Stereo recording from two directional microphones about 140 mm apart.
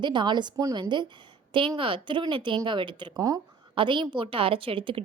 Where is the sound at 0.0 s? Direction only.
35° right (ahead or behind).